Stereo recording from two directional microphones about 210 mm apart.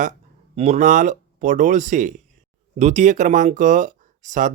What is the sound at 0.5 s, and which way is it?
Speech, 30° right (ahead or behind).